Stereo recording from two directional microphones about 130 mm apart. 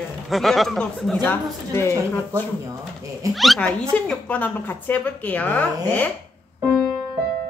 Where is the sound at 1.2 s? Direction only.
20° left (ahead or behind).